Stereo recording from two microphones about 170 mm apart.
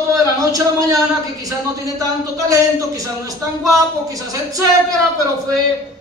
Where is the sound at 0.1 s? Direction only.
20° right (ahead or behind).